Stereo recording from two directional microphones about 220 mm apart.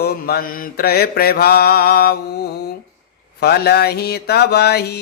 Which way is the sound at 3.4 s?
45° left (ahead or behind).